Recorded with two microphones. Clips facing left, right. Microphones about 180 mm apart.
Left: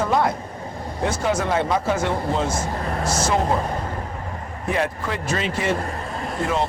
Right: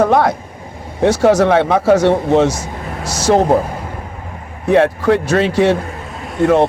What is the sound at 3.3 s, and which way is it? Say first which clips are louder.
Speech: right 12 dB; 70° right (ahead or behind).